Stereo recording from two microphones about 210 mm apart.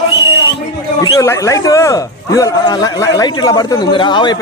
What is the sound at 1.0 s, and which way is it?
A man's voice, 15° left (ahead or behind).